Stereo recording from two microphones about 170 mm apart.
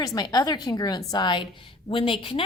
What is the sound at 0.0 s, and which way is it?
A woman's voice, 20° left (ahead or behind).